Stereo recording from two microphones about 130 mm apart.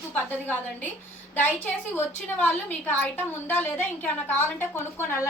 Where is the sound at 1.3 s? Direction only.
15° left (ahead or behind).